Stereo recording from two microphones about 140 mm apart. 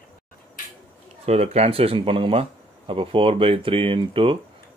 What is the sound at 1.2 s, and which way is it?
Speech, 50° right (ahead or behind).